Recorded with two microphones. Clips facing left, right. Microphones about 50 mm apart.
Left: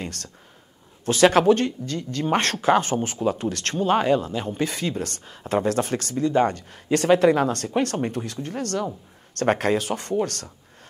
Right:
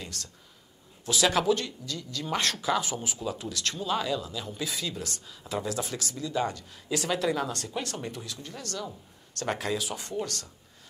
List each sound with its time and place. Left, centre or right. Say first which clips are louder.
0.0 s speech: left 7 dB; left